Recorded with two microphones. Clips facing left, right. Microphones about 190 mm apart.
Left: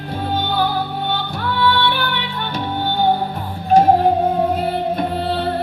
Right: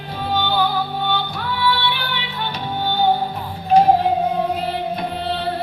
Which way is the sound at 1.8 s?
50° left (ahead or behind).